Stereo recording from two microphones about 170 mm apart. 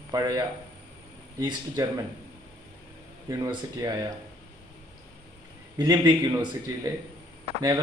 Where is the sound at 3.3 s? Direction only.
25° right (ahead or behind).